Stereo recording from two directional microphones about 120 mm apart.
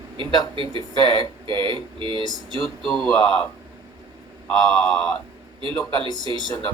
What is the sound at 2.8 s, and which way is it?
Speech, centre (ahead or behind).